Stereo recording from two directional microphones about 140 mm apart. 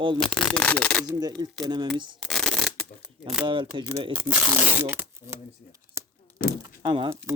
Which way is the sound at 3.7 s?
35° right (ahead or behind).